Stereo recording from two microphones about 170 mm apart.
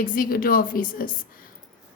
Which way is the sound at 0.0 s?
55° left (ahead or behind).